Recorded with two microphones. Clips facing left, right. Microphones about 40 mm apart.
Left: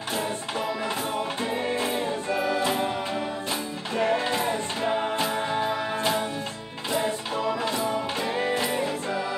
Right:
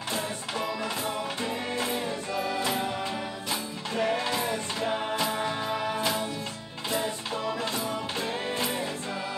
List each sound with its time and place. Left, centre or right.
1.1 s music: centre
3.9 s music: centre
8.2 s music: left